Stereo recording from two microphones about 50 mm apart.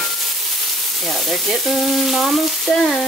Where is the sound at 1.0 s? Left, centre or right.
Centre.